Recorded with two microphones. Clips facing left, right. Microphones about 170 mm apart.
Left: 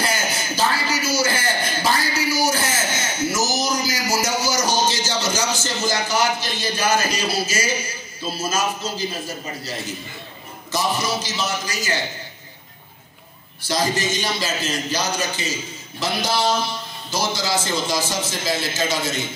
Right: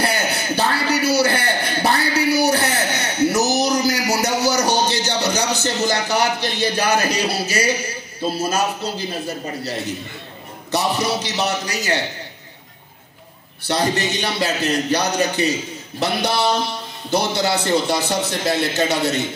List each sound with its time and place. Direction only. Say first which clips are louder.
0.0 s a sound: right 3 dB; 65° right (ahead or behind)
8.2 s a man's voice: right 4 dB; 60° right (ahead or behind)
13.7 s a man's voice: right 2 dB; 65° right (ahead or behind)